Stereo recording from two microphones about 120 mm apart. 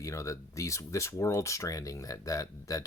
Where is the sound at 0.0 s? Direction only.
25° left (ahead or behind).